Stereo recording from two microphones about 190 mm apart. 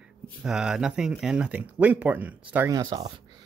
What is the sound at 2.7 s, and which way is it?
Speech, 20° right (ahead or behind).